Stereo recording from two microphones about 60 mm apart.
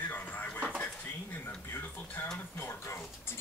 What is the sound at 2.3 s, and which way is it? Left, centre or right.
Speech, left.